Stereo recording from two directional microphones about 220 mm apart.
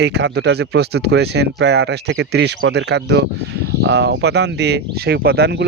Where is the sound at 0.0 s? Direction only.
50° right (ahead or behind).